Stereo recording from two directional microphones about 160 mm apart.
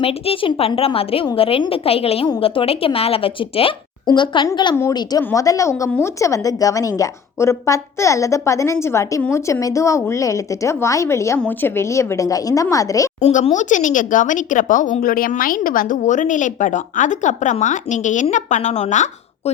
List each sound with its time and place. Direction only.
0.0 s a woman's voice: 35° left (ahead or behind); by 13.1 s 20° left (ahead or behind)
13.2 s speech: 45° left (ahead or behind)